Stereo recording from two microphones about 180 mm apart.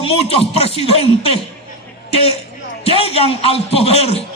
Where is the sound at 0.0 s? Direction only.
30° left (ahead or behind).